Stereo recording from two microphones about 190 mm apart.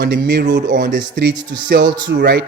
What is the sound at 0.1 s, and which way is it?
Speech, 60° right (ahead or behind).